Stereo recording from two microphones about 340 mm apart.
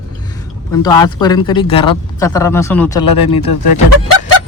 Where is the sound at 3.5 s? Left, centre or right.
Left.